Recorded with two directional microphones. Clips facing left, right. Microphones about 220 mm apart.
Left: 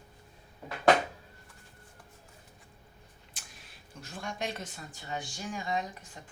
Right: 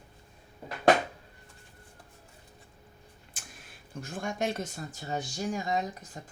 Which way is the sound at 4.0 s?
50° right (ahead or behind).